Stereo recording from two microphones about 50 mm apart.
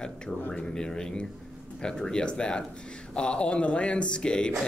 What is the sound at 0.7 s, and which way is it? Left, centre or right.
Speech, centre.